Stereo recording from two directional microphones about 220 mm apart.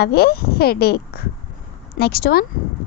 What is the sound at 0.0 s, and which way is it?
A woman's voice, 45° left (ahead or behind).